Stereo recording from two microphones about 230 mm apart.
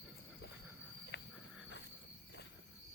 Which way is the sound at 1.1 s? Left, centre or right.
Left.